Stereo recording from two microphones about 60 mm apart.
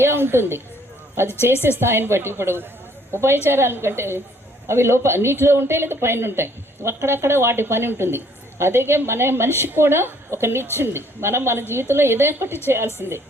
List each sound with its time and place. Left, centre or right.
0.0 s a woman's voice: right